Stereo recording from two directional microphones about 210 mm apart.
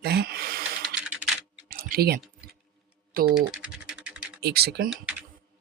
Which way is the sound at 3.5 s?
5° right (ahead or behind).